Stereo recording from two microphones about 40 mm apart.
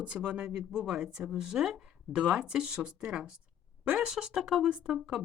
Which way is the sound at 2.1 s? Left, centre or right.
Right.